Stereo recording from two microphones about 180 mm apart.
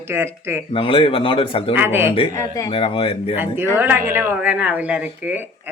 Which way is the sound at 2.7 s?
30° left (ahead or behind).